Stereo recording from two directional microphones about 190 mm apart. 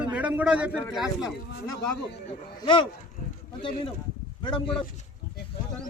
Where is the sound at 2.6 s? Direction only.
25° left (ahead or behind).